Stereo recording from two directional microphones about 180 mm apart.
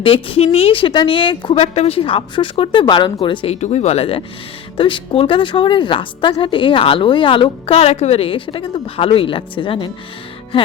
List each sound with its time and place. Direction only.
0.0 s a woman's voice: 30° left (ahead or behind)
10.5 s music: 30° left (ahead or behind)